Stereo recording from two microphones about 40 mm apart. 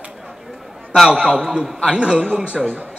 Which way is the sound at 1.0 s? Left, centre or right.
Centre.